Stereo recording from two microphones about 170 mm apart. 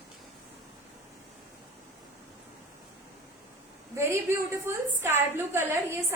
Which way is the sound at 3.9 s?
15° right (ahead or behind).